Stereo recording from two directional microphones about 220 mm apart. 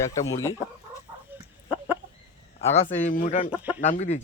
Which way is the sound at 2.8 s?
35° left (ahead or behind).